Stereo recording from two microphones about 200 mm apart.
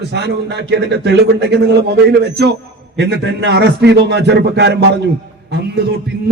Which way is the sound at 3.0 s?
55° right (ahead or behind).